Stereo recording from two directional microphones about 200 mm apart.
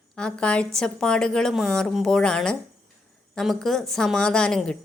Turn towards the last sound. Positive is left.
turn(degrees=5)  # may be behind; listen again after turning